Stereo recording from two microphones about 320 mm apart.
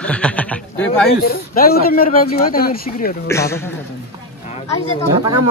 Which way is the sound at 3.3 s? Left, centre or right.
Centre.